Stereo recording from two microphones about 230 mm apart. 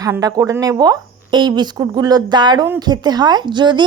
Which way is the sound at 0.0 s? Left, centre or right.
Centre.